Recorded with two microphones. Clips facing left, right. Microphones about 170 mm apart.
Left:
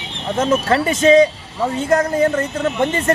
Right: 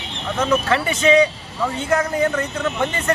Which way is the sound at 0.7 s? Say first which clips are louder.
Left 6 dB; 40° left (ahead or behind).